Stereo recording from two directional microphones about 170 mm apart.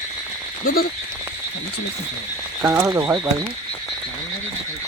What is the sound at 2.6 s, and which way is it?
Speech, 20° right (ahead or behind).